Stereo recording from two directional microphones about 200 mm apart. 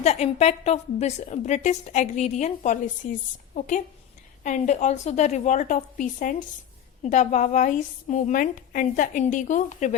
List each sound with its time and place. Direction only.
0.0 s a woman's voice: 35° left (ahead or behind)